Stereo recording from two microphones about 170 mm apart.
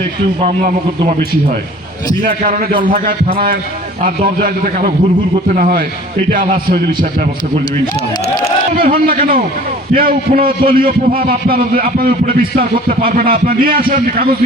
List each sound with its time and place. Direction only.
0.3 s a man's voice: 45° right (ahead or behind)
8.7 s a man's voice: 60° right (ahead or behind)